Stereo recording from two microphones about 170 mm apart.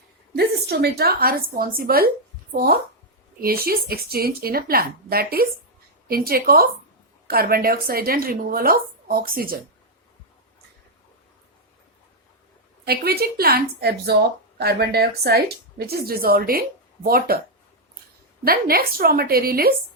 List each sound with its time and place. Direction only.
0.3 s speech: 70° right (ahead or behind)
12.8 s a woman's voice: 65° right (ahead or behind)
18.4 s speech: 60° right (ahead or behind)